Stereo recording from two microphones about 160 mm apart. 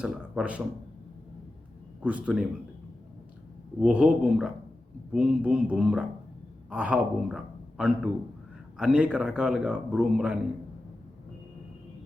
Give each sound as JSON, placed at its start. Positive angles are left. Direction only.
{"t": 0.0, "sound": "speech", "side_deg": -5}
{"t": 2.0, "sound": "speech", "side_deg": -10}
{"t": 3.8, "sound": "a man's voice", "side_deg": -5}